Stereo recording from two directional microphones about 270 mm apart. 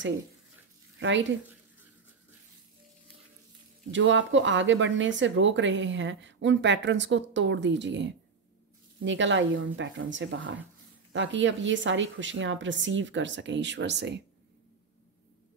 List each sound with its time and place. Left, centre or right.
0.9 s speech: right
3.9 s speech: right